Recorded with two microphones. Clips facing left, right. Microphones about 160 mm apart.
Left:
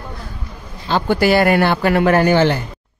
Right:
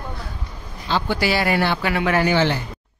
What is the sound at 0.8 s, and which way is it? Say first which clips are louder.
Speech: left 6 dB; 50° left (ahead or behind).